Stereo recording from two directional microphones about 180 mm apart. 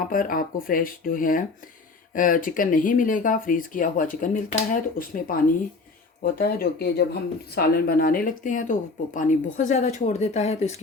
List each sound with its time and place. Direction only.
0.0 s speech: 50° left (ahead or behind)